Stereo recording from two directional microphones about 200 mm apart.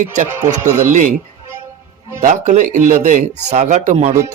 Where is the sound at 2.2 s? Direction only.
40° right (ahead or behind).